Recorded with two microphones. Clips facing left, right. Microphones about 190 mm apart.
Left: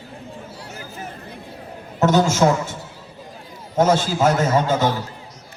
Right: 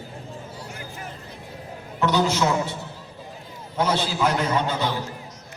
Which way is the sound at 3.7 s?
45° left (ahead or behind).